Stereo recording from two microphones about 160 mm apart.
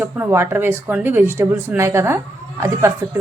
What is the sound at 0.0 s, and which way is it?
Speech, 15° right (ahead or behind).